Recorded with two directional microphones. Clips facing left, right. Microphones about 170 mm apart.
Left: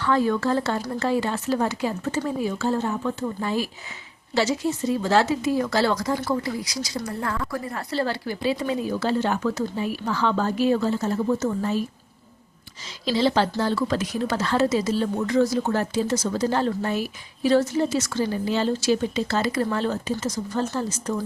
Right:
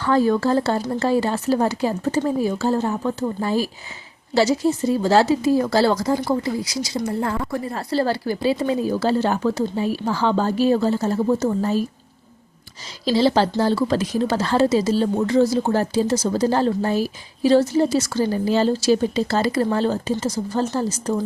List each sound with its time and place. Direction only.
0.0 s speech: 35° right (ahead or behind)
13.1 s speech: 35° right (ahead or behind)